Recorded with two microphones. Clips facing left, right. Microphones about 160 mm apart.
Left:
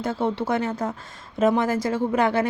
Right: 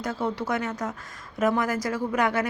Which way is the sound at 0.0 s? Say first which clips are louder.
Left 4 dB; 25° left (ahead or behind).